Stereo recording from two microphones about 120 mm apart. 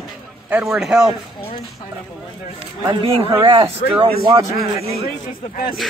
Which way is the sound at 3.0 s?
45° right (ahead or behind).